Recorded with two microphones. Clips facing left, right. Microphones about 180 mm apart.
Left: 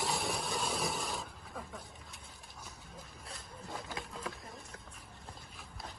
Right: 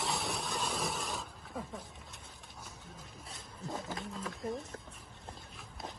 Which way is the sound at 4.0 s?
Centre (ahead or behind).